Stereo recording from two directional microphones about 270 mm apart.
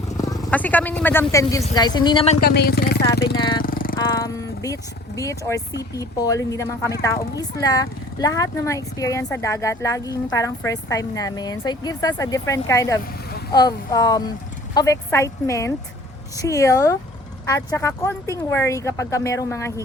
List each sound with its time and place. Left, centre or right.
0.2 s speech: centre
2.5 s speech: left
3.3 s speech: centre
3.6 s jackhammer: left
3.9 s speech: centre